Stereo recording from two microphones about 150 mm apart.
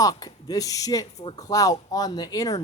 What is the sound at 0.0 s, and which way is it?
A man's voice, 25° left (ahead or behind).